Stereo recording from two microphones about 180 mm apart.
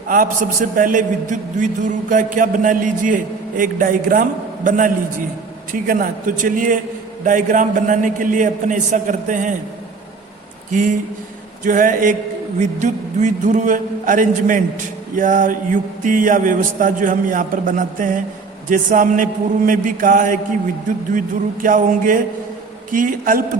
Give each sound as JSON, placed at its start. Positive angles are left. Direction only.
{"t": 0.1, "sound": "a man's voice", "side_deg": -50}
{"t": 10.7, "sound": "a man's voice", "side_deg": -45}